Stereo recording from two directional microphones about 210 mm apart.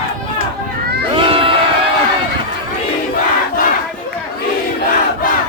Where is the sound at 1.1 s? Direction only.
25° right (ahead or behind).